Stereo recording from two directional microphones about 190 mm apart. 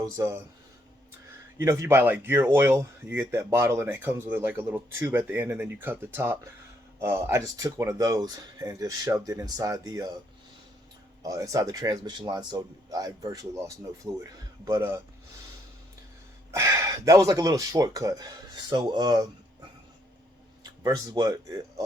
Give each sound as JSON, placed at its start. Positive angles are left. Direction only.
{"t": 0.0, "sound": "speech", "side_deg": -15}
{"t": 1.5, "sound": "speech", "side_deg": -15}
{"t": 11.2, "sound": "a man's voice", "side_deg": -20}
{"t": 16.5, "sound": "a man's voice", "side_deg": -15}
{"t": 20.7, "sound": "speech", "side_deg": -20}